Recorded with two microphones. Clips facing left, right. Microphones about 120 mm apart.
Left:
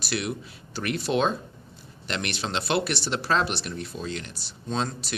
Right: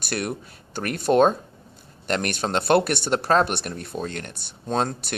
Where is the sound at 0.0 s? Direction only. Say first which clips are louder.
Right 2 dB; 50° right (ahead or behind).